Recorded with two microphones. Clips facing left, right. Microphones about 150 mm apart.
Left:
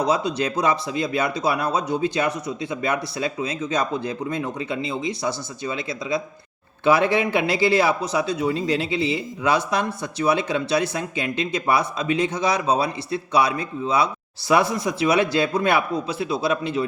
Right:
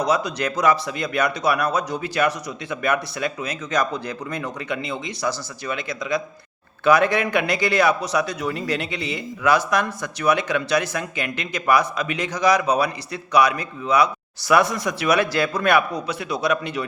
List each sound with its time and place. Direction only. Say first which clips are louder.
0.0 s a man's voice: even; 25° left (ahead or behind)